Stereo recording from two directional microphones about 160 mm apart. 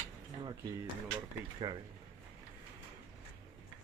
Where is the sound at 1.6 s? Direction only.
30° right (ahead or behind).